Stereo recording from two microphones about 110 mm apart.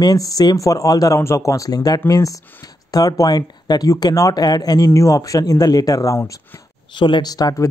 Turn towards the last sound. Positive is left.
turn(degrees=35)  # may be behind; listen again after turning